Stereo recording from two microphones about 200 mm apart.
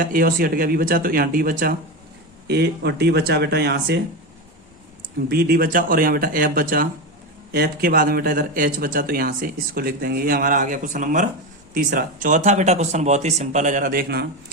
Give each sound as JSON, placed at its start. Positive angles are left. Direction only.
{"t": 0.0, "sound": "speech", "side_deg": -45}
{"t": 5.3, "sound": "speech", "side_deg": -50}